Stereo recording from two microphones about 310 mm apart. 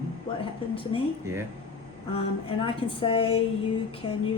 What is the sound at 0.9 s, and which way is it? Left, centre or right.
Speech, centre.